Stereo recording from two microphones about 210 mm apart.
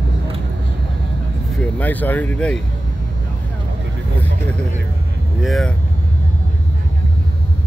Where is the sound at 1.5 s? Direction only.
5° left (ahead or behind).